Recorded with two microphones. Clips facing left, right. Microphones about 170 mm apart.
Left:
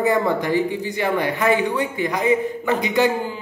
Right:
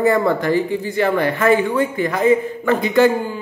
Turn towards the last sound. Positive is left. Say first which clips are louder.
# right 4 dB
turn(degrees=15)  # may be behind; listen again after turning